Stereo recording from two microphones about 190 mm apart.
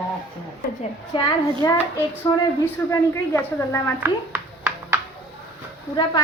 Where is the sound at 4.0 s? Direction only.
10° right (ahead or behind).